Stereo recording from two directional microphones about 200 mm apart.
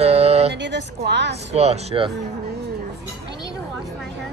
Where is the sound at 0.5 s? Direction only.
60° right (ahead or behind).